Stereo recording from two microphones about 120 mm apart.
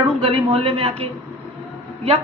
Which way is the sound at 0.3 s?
50° right (ahead or behind).